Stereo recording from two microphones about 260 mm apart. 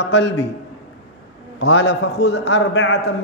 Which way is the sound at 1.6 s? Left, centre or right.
Left.